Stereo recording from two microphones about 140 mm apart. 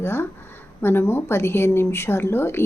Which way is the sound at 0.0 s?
15° left (ahead or behind).